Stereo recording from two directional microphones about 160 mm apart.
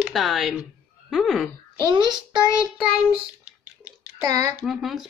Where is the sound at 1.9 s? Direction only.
30° right (ahead or behind).